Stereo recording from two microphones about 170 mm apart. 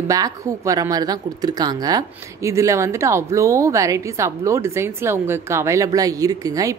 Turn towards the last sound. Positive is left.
turn(degrees=-20)  # may be behind; listen again after turning